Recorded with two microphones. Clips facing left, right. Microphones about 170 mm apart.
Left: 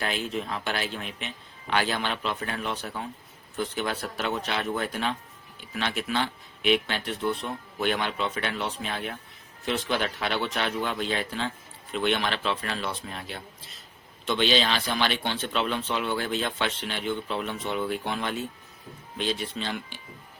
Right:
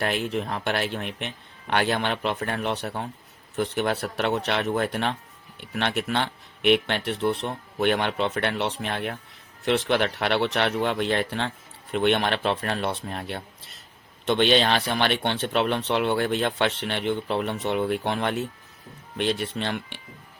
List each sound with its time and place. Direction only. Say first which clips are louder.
0.0 s speech: right 4 dB; 65° right (ahead or behind)